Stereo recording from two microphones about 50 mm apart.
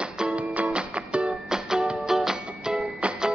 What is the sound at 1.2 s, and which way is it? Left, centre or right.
Music, centre.